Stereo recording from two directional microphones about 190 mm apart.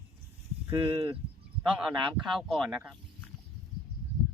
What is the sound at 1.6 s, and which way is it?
A man's voice, centre (ahead or behind).